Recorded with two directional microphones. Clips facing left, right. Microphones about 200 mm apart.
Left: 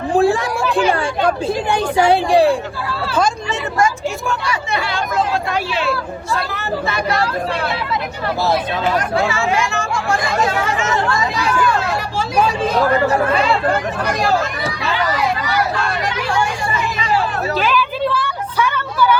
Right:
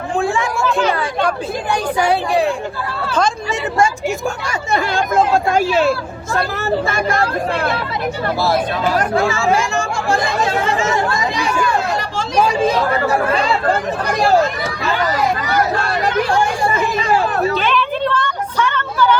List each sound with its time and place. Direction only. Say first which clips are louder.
0.1 s speech: left 4 dB; 35° left (ahead or behind)
1.7 s speech: left 2 dB; 25° left (ahead or behind)
4.3 s speech: right 1 dB; 45° right (ahead or behind)
9.4 s speech: right 2 dB; 30° right (ahead or behind)
10.9 s speech: even; 15° right (ahead or behind)
14.9 s vehicle: right 2 dB; 45° right (ahead or behind)
17.6 s a sound: even; 5° left (ahead or behind)